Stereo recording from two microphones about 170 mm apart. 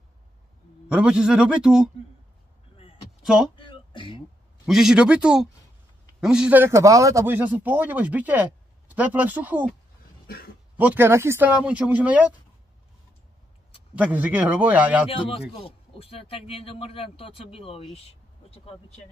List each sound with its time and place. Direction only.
0.8 s a man's voice: 5° right (ahead or behind)
3.2 s a sound: 5° right (ahead or behind)
3.5 s a sound: 30° left (ahead or behind)
4.6 s a man's voice: 5° right (ahead or behind)
10.2 s speech: 65° left (ahead or behind)
10.8 s speech: 15° right (ahead or behind)
13.9 s speech: 10° right (ahead or behind)
15.0 s speech: 30° left (ahead or behind)
17.9 s vehicle: 35° left (ahead or behind)